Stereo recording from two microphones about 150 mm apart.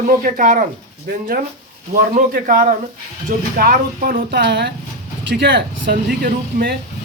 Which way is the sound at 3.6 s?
80° right.